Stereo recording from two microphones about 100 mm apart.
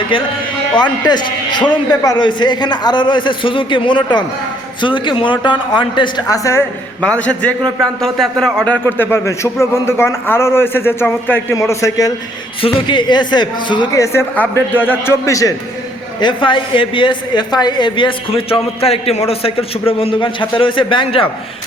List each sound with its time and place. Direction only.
0.1 s a woman's voice: 60° left (ahead or behind)
0.8 s a man's voice: 45° left (ahead or behind); by 6.7 s 30° left (ahead or behind)
7.8 s speech: 5° left (ahead or behind)
8.7 s a man's voice: 20° left (ahead or behind)
12.6 s a man's voice: 50° left (ahead or behind)
13.9 s a man's voice: 30° left (ahead or behind)
15.3 s a man's voice: 35° left (ahead or behind)
16.2 s a woman's voice: 55° left (ahead or behind)